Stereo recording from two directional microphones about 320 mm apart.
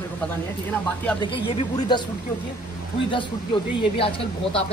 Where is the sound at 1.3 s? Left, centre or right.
Centre.